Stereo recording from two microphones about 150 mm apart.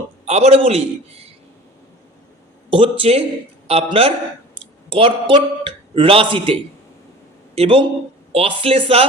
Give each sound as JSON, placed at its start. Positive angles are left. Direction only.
{"t": 0.3, "sound": "a man's voice", "side_deg": -45}
{"t": 2.6, "sound": "a man's voice", "side_deg": -35}